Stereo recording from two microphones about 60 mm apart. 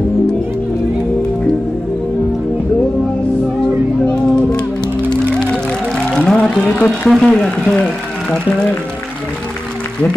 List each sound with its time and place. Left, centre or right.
4.1 s music: centre
6.1 s speech: centre